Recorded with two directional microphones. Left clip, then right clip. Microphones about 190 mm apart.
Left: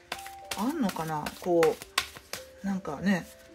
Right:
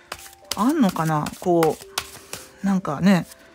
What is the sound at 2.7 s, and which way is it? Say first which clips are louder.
Speech: right 10 dB; 45° right (ahead or behind).